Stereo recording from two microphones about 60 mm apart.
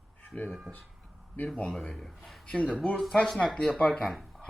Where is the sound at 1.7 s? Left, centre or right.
Centre.